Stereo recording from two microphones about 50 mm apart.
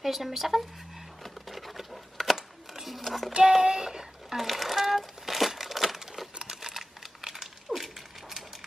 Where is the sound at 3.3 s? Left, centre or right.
Centre.